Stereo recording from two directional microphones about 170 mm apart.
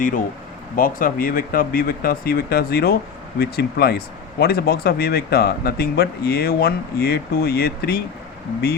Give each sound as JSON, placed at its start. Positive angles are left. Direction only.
{"t": 0.8, "sound": "speech", "side_deg": 55}